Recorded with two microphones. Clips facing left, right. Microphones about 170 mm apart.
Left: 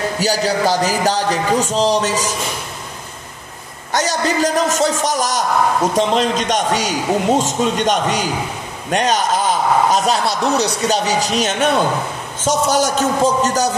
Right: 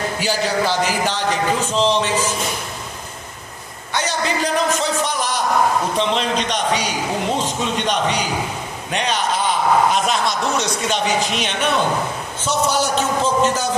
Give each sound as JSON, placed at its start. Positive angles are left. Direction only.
{"t": 0.2, "sound": "speech", "side_deg": 40}
{"t": 3.9, "sound": "a man's voice", "side_deg": 40}